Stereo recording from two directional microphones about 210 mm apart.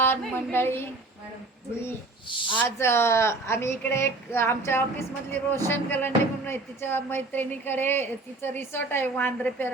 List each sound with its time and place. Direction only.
0.0 s a woman's voice: 10° left (ahead or behind)
2.3 s speech: 25° left (ahead or behind)
2.6 s a woman's voice: 10° left (ahead or behind)